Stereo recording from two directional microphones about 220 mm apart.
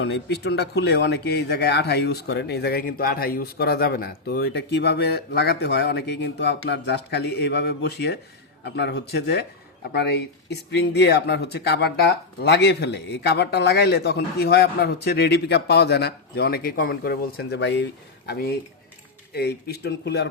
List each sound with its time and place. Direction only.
0.0 s a man's voice: 50° left (ahead or behind)